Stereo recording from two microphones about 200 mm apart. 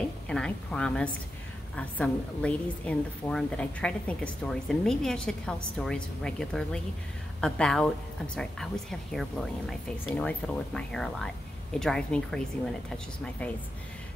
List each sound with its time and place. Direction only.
0.3 s a woman's voice: 5° left (ahead or behind)
9.1 s a woman's voice: centre (ahead or behind)